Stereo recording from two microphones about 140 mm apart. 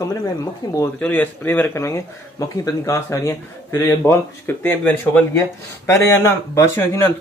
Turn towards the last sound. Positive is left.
turn(degrees=15)  # may be behind; listen again after turning